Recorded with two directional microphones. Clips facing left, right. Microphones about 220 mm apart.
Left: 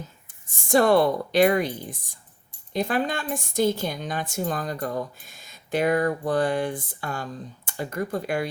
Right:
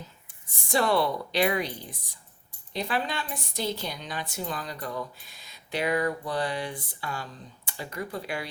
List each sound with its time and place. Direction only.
0.7 s a woman's voice: 50° left (ahead or behind)